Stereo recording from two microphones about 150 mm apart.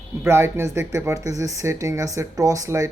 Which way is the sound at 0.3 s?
15° right (ahead or behind).